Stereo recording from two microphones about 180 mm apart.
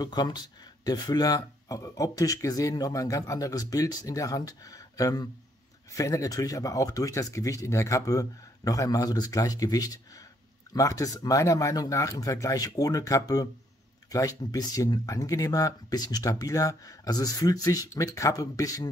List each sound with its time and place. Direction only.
0.0 s speech: 25° left (ahead or behind)